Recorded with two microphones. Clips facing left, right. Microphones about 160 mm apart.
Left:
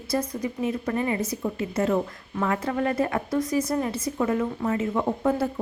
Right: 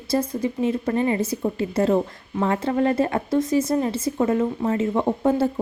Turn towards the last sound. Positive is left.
turn(degrees=-30)  # may be behind; listen again after turning